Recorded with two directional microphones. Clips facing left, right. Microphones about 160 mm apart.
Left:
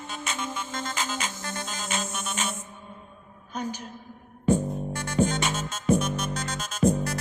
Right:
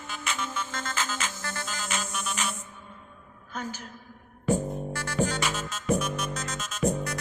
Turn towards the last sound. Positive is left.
turn(degrees=30)  # may be behind; listen again after turning